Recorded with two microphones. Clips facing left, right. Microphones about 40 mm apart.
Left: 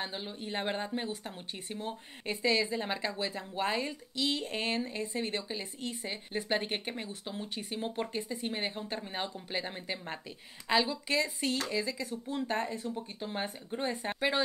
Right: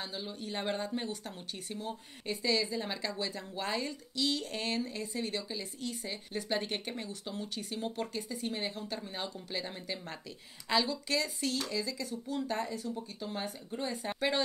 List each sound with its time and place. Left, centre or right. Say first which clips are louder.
0.0 s speech: left 2 dB; left